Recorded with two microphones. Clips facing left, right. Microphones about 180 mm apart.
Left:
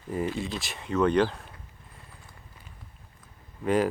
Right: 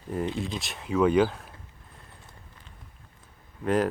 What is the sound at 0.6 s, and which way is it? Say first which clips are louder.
Speech: right 2 dB; centre (ahead or behind).